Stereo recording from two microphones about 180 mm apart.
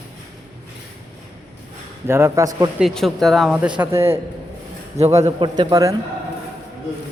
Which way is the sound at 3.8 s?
15° right (ahead or behind).